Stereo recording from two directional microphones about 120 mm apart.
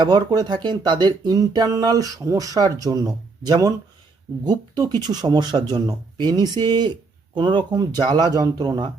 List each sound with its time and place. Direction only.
0.0 s speech: 35° right (ahead or behind)